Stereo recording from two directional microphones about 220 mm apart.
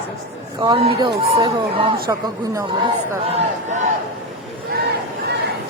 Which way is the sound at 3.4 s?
30° right (ahead or behind).